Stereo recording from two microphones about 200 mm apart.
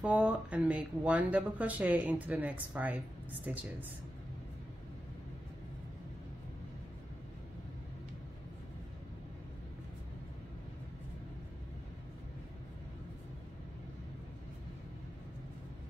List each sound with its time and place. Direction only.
0.0 s speech: 5° right (ahead or behind)